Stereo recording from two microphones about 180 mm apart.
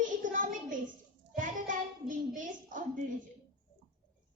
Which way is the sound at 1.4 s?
45° right (ahead or behind).